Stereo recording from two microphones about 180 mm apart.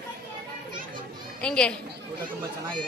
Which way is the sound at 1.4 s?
5° left (ahead or behind).